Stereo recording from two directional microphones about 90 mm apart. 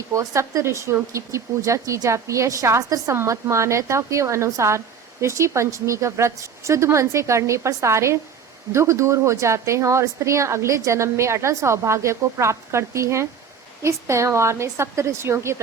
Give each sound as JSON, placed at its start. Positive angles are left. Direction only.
{"t": 0.1, "sound": "a woman's voice", "side_deg": -35}